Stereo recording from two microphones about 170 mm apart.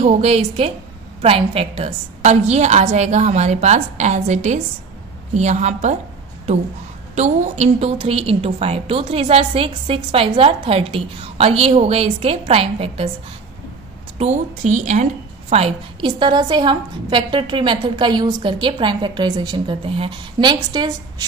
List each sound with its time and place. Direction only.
0.0 s a woman's voice: 40° right (ahead or behind)
7.2 s a woman's voice: 40° right (ahead or behind)
14.1 s a woman's voice: 40° right (ahead or behind)
15.5 s a woman's voice: 30° right (ahead or behind)